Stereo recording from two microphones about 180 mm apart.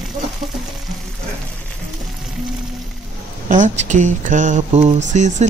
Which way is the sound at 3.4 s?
45° right (ahead or behind).